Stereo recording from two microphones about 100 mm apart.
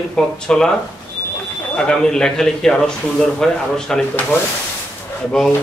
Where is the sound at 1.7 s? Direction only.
5° left (ahead or behind).